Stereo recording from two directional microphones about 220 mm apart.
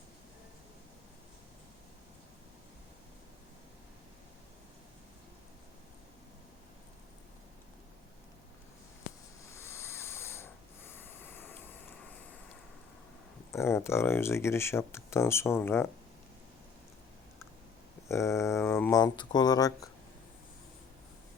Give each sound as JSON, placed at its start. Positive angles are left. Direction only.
{"t": 9.5, "sound": "a sound", "side_deg": 10}
{"t": 13.5, "sound": "speech", "side_deg": 10}
{"t": 18.1, "sound": "speech", "side_deg": 15}